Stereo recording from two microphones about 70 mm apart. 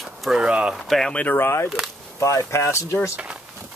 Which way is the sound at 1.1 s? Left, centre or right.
Left.